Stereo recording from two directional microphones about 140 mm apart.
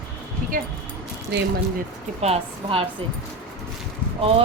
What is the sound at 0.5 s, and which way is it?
Speech, 75° right (ahead or behind).